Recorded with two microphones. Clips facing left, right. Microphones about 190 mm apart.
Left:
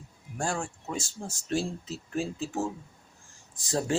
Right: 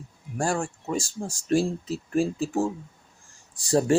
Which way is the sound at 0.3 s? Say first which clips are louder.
Right 5 dB; 10° right (ahead or behind).